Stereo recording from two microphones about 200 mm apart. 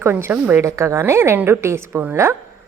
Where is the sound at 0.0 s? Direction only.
10° right (ahead or behind).